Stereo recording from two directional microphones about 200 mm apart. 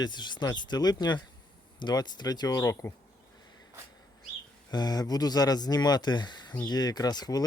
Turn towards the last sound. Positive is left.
turn(degrees=20)  # may be behind; listen again after turning